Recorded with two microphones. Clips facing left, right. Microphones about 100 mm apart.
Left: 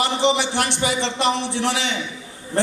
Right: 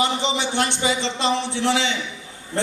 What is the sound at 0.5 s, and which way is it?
A man's voice, 65° left (ahead or behind).